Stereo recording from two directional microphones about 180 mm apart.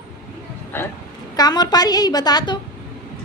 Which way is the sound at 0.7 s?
10° left (ahead or behind).